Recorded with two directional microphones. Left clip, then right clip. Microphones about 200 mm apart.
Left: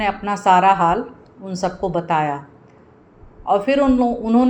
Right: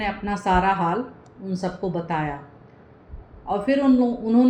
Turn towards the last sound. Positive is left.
turn(degrees=20)  # may be behind; listen again after turning